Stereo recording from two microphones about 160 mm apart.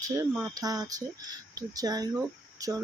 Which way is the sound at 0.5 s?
25° right (ahead or behind).